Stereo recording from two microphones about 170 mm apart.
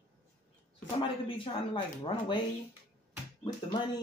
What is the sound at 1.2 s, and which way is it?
Speech, 30° left (ahead or behind).